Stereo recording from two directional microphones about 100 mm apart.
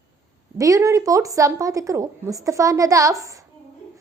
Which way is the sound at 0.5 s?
35° right (ahead or behind).